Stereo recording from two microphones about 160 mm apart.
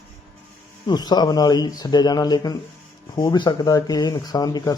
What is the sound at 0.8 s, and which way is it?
Speech, 25° left (ahead or behind).